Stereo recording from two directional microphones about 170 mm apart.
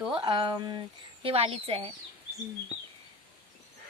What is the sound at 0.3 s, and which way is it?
Speech, 25° right (ahead or behind).